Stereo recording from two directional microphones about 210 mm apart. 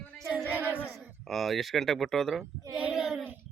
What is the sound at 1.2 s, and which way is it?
Speech, centre (ahead or behind).